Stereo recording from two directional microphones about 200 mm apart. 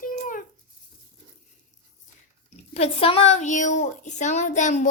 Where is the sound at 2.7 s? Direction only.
30° left (ahead or behind).